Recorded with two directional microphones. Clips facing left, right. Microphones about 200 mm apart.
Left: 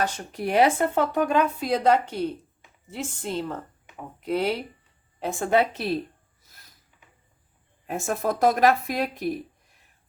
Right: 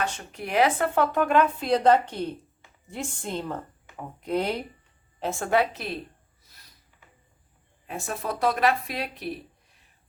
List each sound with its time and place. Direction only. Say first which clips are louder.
0.0 s speech: left 4 dB; 35° left (ahead or behind)
0.9 s a woman's voice: even; 15° left (ahead or behind)
5.2 s speech: left 2 dB; 15° left (ahead or behind)
7.9 s speech: left 5 dB; 45° left (ahead or behind)